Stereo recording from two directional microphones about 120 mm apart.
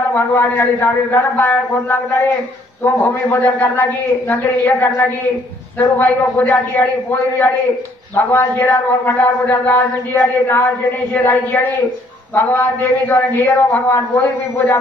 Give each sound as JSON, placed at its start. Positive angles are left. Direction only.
{"t": 0.1, "sound": "a man's voice", "side_deg": 15}